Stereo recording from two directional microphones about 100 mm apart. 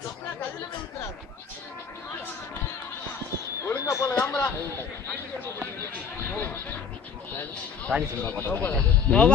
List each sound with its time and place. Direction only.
3.6 s a sound: 30° left (ahead or behind)
6.3 s music: 20° left (ahead or behind)
7.9 s speech: 15° right (ahead or behind)
8.5 s speech: 10° left (ahead or behind)